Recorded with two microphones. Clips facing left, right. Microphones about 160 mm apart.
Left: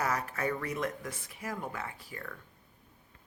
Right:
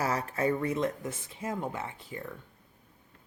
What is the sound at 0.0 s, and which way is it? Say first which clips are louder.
Speech: right 3 dB; 30° right (ahead or behind).